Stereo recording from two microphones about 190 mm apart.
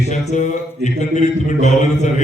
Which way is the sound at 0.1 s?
40° left (ahead or behind).